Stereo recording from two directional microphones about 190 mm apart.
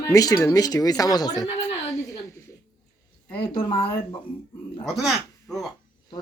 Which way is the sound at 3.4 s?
30° left (ahead or behind).